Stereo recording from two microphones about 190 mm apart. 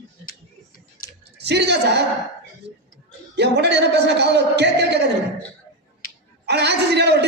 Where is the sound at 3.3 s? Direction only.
60° right (ahead or behind).